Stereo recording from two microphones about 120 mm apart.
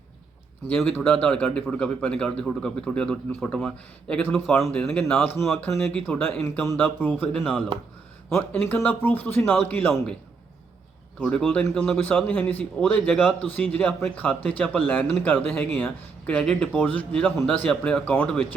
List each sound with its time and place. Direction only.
0.7 s speech: 5° left (ahead or behind)
8.4 s speech: 15° left (ahead or behind)
11.2 s speech: 5° left (ahead or behind)